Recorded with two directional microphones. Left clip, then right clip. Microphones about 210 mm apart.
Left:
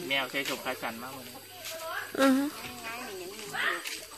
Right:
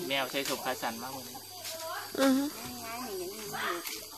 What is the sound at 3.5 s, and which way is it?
Bathtub, 50° right (ahead or behind).